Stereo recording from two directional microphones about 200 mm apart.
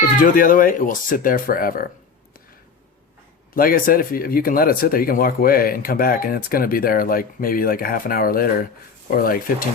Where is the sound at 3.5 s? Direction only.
45° left (ahead or behind).